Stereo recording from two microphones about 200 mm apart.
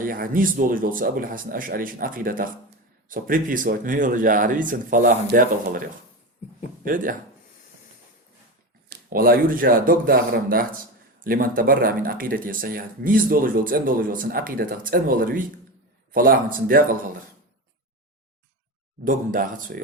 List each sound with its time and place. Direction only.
0.0 s speech: 45° right (ahead or behind)
6.8 s speech: 45° right (ahead or behind)
8.9 s speech: 45° right (ahead or behind)
19.0 s speech: 45° right (ahead or behind)